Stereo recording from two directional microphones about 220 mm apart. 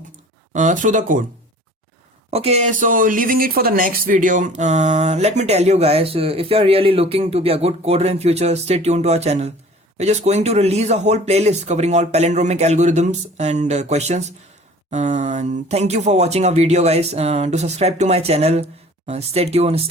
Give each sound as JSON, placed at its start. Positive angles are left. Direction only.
{"t": 0.5, "sound": "speech", "side_deg": -35}
{"t": 2.3, "sound": "speech", "side_deg": -30}